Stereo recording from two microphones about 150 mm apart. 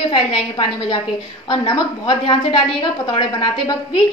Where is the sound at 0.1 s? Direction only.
35° left (ahead or behind).